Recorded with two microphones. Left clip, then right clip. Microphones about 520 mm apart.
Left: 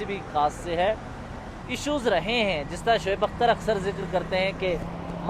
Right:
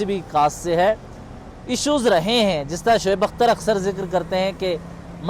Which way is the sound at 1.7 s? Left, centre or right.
Right.